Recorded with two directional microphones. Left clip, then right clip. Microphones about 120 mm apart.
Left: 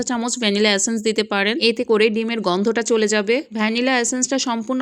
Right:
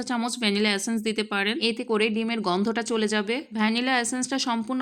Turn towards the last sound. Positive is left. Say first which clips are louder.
# left 6 dB
turn(degrees=30)  # may be behind; listen again after turning